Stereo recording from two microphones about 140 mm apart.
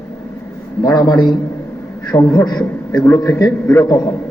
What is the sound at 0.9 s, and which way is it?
A man's voice, 30° left (ahead or behind).